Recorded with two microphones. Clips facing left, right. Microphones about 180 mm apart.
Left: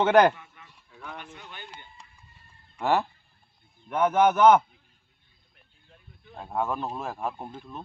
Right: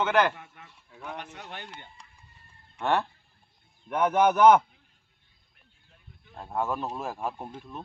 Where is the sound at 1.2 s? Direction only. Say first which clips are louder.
Right 3 dB; 75° right (ahead or behind).